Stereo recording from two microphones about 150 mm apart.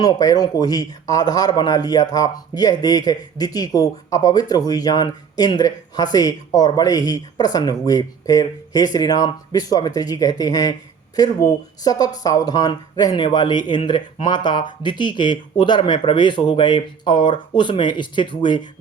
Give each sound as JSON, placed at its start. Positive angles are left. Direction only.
{"t": 0.0, "sound": "speech", "side_deg": 25}